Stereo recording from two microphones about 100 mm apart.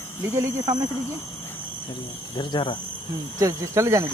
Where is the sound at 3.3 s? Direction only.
30° right (ahead or behind).